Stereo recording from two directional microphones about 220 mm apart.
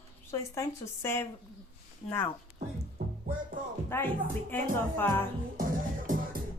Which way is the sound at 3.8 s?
10° left (ahead or behind).